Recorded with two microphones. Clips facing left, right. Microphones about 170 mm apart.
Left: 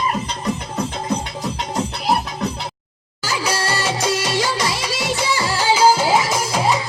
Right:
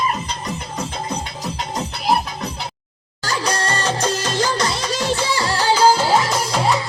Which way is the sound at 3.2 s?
10° left (ahead or behind).